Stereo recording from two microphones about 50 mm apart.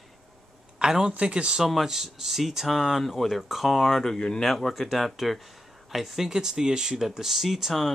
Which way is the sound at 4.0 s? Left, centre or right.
Centre.